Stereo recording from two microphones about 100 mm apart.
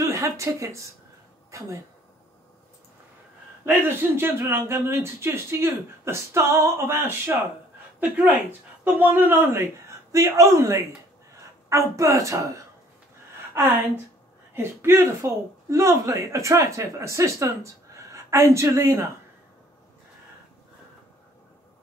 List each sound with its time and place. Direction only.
0.0 s speech: 30° right (ahead or behind)
3.6 s speech: 20° right (ahead or behind)
14.5 s speech: 25° right (ahead or behind)